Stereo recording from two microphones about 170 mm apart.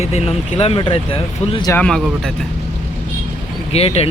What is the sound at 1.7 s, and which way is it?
Speech, 5° left (ahead or behind).